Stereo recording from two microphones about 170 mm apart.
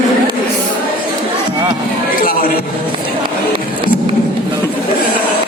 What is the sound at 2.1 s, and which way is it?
Music, 55° left (ahead or behind).